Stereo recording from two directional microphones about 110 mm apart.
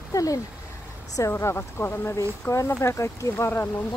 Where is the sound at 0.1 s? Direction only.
30° left (ahead or behind).